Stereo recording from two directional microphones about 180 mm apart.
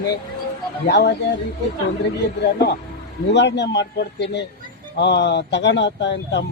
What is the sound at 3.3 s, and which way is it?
Speech, 75° left (ahead or behind).